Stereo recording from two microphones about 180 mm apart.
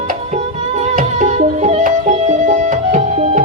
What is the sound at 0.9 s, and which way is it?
Music, 40° right (ahead or behind).